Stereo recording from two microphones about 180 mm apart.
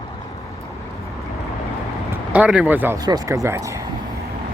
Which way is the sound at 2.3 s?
5° right (ahead or behind).